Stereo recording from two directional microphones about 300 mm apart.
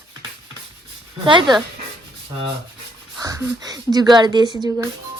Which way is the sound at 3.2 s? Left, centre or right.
Centre.